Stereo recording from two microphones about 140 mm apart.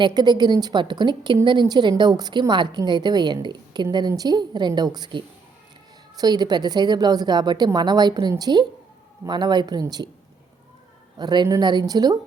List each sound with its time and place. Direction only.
0.0 s a woman's voice: 30° right (ahead or behind)
11.2 s a woman's voice: 30° right (ahead or behind)